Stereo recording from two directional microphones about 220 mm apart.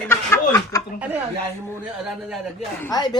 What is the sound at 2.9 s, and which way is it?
Speech, 20° left (ahead or behind).